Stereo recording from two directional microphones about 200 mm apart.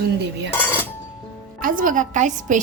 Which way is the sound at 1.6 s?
45° right (ahead or behind).